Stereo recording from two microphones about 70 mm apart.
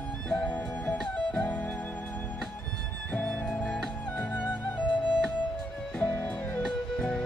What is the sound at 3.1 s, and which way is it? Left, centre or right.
Music, left.